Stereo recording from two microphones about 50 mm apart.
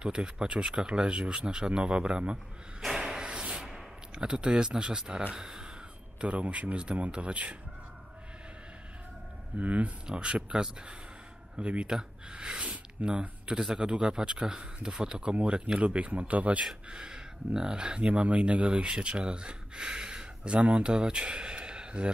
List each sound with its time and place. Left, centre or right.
0.0 s speech: centre
2.8 s a sound: centre
3.6 s speech: centre
6.2 s speech: right
9.6 s speech: right
16.9 s speech: centre